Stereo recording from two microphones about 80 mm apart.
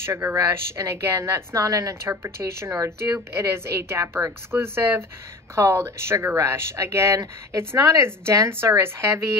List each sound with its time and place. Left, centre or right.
0.0 s a woman's voice: right